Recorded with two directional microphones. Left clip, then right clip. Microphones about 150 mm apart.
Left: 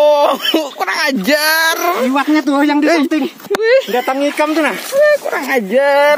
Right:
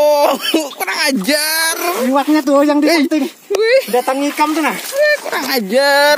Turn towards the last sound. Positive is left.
turn(degrees=-15)  # may be behind; listen again after turning